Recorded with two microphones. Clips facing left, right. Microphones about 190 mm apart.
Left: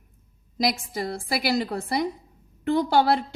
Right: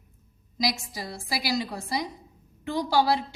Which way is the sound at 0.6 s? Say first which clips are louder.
Left 4 dB; 55° left (ahead or behind).